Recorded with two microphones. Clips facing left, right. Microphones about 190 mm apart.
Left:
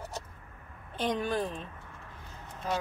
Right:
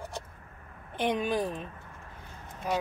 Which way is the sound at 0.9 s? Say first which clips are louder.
Right 2 dB; 15° right (ahead or behind).